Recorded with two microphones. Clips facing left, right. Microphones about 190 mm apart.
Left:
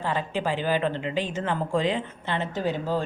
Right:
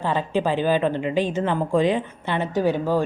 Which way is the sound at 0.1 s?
20° right (ahead or behind).